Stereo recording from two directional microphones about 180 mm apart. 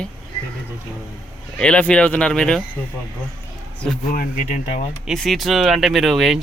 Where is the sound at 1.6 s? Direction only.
5° left (ahead or behind).